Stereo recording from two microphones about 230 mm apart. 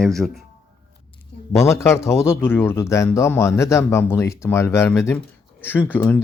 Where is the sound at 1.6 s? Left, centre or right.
Centre.